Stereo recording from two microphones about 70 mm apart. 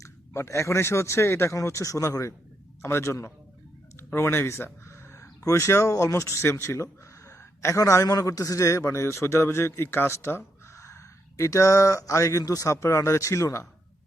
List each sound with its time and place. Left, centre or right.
0.0 s a man's voice: left